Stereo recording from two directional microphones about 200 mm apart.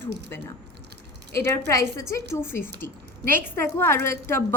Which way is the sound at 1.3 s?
10° left (ahead or behind).